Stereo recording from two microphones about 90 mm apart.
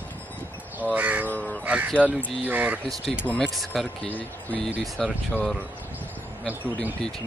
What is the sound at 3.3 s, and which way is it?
Speech, centre (ahead or behind).